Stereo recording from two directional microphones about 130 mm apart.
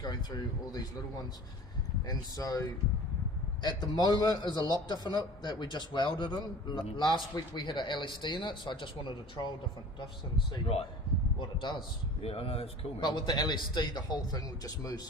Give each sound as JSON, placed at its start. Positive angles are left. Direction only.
{"t": 0.0, "sound": "a man's voice", "side_deg": 30}
{"t": 2.0, "sound": "a man's voice", "side_deg": 25}
{"t": 11.3, "sound": "a man's voice", "side_deg": 35}
{"t": 12.2, "sound": "speech", "side_deg": 50}
{"t": 13.0, "sound": "a man's voice", "side_deg": 35}